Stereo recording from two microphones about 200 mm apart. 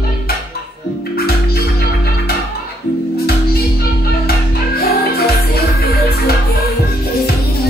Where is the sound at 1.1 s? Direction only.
50° left (ahead or behind).